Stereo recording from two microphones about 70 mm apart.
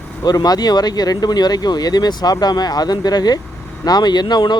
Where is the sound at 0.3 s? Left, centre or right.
Left.